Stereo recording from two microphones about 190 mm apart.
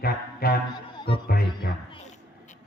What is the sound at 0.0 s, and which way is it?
Music, 55° left (ahead or behind).